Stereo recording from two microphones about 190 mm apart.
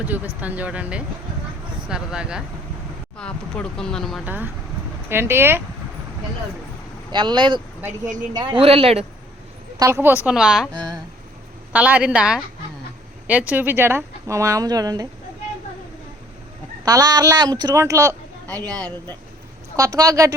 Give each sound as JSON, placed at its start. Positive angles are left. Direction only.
{"t": 0.4, "sound": "a woman's voice", "side_deg": -10}
{"t": 4.3, "sound": "a woman's voice", "side_deg": -10}
{"t": 7.1, "sound": "speech", "side_deg": -25}
{"t": 9.7, "sound": "a woman's voice", "side_deg": -15}
{"t": 10.8, "sound": "a sound", "side_deg": 5}
{"t": 11.7, "sound": "a woman's voice", "side_deg": -10}
{"t": 13.5, "sound": "a woman's voice", "side_deg": -10}
{"t": 16.8, "sound": "speech", "side_deg": -20}
{"t": 19.7, "sound": "a woman's voice", "side_deg": -15}